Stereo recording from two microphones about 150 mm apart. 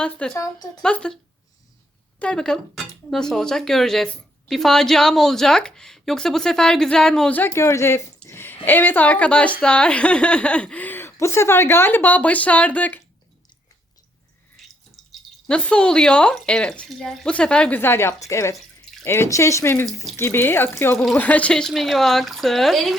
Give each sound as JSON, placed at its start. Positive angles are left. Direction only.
{"t": 0.0, "sound": "speech", "side_deg": 5}
{"t": 0.3, "sound": "a woman's voice", "side_deg": 20}
{"t": 0.8, "sound": "speech", "side_deg": 5}
{"t": 14.6, "sound": "drip", "side_deg": 0}
{"t": 15.1, "sound": "speech", "side_deg": 5}